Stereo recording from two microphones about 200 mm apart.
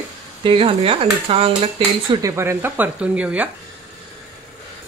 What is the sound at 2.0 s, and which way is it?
Speech, 15° right (ahead or behind).